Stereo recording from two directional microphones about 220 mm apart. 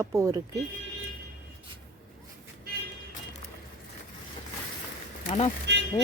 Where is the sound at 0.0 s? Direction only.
15° right (ahead or behind).